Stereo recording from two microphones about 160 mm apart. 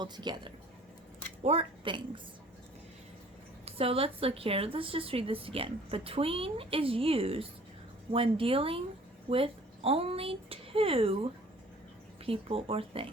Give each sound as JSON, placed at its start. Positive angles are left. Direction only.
{"t": 0.0, "sound": "a woman's voice", "side_deg": -30}
{"t": 3.7, "sound": "a woman's voice", "side_deg": -40}